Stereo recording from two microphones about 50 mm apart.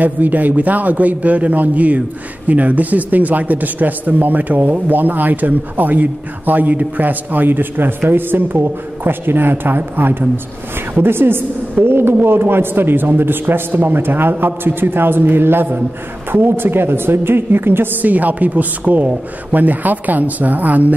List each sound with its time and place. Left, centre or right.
0.0 s a man's voice: right
18.0 s a man's voice: right